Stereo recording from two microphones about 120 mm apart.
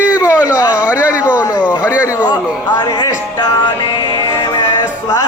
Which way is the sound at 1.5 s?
10° right (ahead or behind).